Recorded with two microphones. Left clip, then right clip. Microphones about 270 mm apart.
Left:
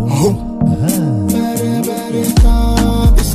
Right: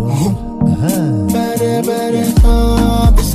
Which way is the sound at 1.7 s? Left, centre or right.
Right.